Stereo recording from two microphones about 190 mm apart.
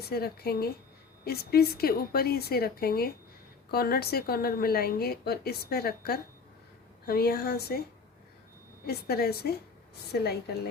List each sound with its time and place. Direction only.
0.0 s a woman's voice: 55° left (ahead or behind)
8.9 s a woman's voice: 55° left (ahead or behind)